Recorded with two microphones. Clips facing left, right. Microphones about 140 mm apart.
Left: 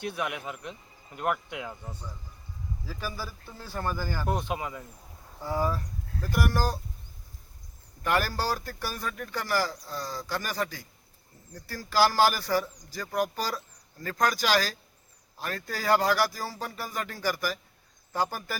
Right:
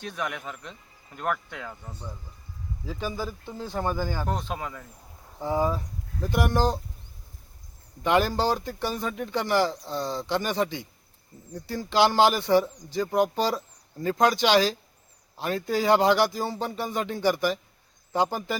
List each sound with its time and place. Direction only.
0.0 s speech: 10° left (ahead or behind)
2.8 s speech: 20° right (ahead or behind)
4.3 s speech: 10° left (ahead or behind)
5.4 s speech: 20° right (ahead or behind)
8.0 s speech: 20° right (ahead or behind)